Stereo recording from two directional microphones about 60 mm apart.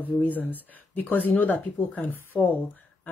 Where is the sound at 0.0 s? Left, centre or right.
Left.